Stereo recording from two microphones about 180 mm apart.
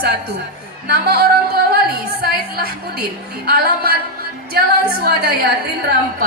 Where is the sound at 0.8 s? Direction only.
60° right (ahead or behind).